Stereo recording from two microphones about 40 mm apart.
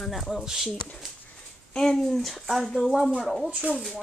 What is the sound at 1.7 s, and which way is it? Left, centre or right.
Speech, centre.